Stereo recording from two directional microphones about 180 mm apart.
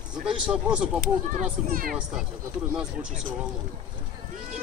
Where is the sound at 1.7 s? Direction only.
50° right (ahead or behind).